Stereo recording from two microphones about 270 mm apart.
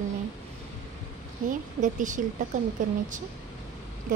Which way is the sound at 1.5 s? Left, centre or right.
Right.